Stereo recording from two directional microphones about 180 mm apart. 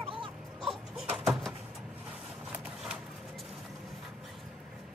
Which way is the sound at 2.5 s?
5° right (ahead or behind).